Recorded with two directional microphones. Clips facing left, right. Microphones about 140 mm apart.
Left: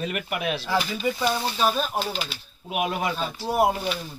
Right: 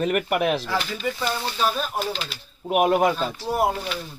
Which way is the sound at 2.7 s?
50° right (ahead or behind).